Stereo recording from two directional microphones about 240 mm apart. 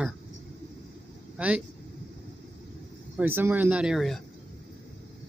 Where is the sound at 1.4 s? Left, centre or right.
Centre.